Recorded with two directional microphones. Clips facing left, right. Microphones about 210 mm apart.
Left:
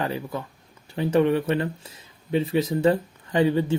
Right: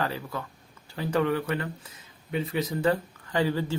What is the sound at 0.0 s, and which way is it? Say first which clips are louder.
Speech: left 3 dB; 20° left (ahead or behind).